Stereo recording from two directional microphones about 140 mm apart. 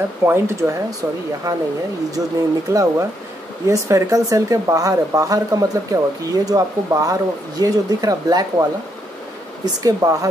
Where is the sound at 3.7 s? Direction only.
20° right (ahead or behind).